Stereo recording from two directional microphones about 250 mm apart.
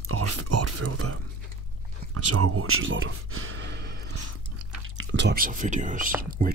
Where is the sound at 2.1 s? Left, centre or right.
Right.